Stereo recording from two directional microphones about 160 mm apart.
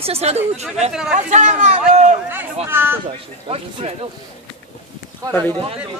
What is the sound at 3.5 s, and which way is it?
Speech, 40° right (ahead or behind).